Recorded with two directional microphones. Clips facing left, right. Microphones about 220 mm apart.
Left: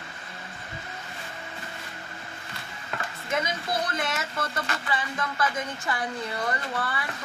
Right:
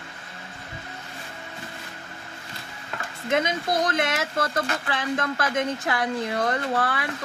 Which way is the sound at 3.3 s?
85° right.